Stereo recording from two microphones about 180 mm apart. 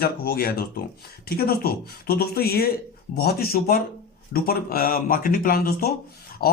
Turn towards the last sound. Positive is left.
turn(degrees=55)  # may be behind; listen again after turning